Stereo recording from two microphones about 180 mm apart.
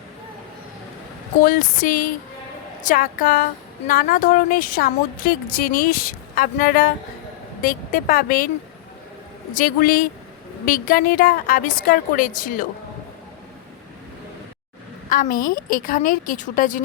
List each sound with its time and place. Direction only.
1.4 s a woman's voice: 50° left (ahead or behind)
9.6 s a woman's voice: 55° left (ahead or behind)
15.1 s a woman's voice: 50° left (ahead or behind)